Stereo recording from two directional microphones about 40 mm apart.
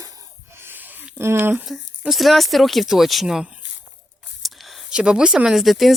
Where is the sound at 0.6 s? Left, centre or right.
Right.